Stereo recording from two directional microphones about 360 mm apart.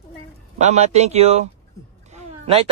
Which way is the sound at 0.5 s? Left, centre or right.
Centre.